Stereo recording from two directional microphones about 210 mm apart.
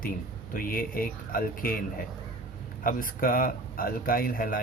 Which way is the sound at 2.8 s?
40° left (ahead or behind).